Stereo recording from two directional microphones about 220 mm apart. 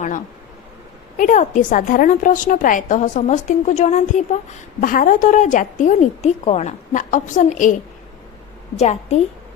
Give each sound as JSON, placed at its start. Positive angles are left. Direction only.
{"t": 1.1, "sound": "a woman's voice", "side_deg": 35}